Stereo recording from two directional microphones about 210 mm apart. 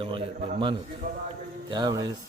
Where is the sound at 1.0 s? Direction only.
40° right (ahead or behind).